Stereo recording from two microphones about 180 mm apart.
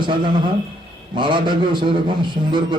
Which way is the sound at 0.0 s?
25° right (ahead or behind).